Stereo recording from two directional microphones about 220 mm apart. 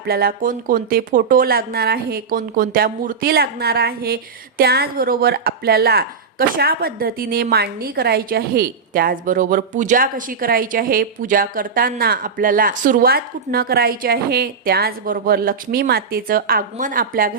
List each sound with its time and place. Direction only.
0.1 s a woman's voice: 45° right (ahead or behind)